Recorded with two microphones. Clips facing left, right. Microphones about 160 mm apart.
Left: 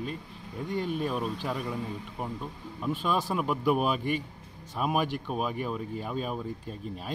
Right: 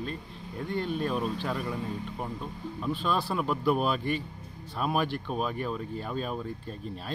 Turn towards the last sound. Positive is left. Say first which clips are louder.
# even
turn(degrees=10)  # may be behind; listen again after turning